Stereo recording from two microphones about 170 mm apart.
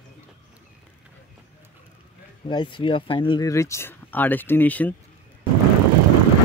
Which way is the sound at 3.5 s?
15° left (ahead or behind).